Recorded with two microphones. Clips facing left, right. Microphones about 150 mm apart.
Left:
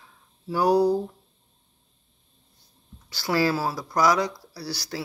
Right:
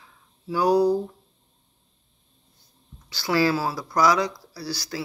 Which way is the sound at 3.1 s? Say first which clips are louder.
Right 2 dB; 45° left (ahead or behind).